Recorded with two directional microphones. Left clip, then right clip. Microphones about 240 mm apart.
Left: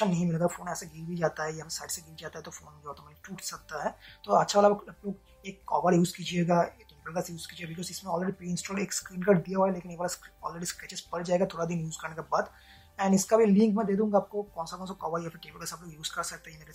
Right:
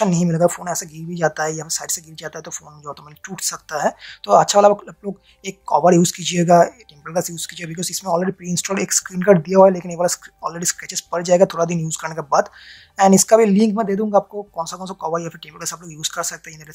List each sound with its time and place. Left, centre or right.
0.0 s speech: right